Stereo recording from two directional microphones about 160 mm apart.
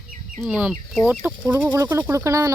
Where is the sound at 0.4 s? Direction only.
5° right (ahead or behind).